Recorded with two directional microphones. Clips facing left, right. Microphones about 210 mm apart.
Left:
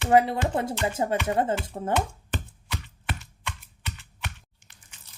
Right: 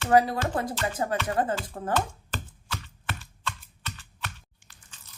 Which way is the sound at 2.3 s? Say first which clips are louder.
Left 3 dB; 20° left (ahead or behind).